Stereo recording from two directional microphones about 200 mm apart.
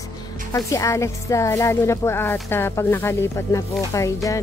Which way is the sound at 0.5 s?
15° left (ahead or behind).